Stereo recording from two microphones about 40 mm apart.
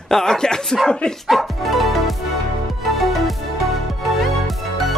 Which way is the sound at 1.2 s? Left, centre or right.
Centre.